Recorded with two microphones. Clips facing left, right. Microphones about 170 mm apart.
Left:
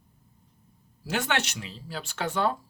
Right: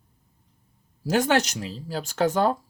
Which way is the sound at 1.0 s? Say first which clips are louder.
Right 7 dB; 40° right (ahead or behind).